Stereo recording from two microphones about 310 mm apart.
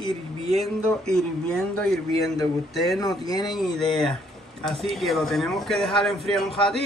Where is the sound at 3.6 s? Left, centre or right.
Centre.